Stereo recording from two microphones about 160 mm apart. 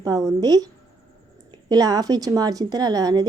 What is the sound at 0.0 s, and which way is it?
A woman's voice, 20° right (ahead or behind).